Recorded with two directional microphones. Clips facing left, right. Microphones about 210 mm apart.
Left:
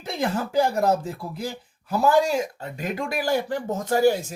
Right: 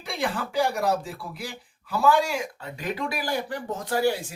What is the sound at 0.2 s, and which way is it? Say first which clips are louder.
Speech: left 3 dB; 45° left (ahead or behind).